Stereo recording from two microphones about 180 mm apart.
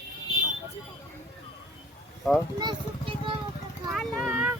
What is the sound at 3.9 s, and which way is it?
Vehicle, 5° right (ahead or behind).